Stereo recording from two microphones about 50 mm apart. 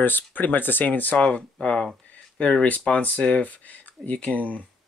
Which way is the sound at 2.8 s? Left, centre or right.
Left.